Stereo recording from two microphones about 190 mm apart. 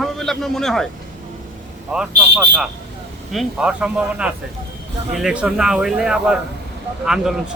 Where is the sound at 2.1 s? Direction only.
65° right (ahead or behind).